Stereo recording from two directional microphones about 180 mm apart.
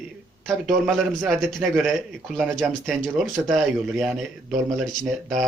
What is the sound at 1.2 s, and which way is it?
Speech, 5° left (ahead or behind).